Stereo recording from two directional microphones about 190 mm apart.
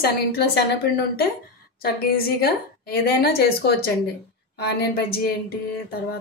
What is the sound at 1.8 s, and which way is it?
A woman's voice, 55° left (ahead or behind).